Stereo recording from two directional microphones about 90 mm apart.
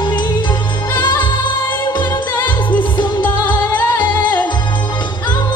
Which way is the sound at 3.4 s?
20° left (ahead or behind).